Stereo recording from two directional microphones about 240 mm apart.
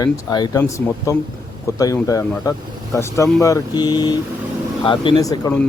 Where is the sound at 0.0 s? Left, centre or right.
Centre.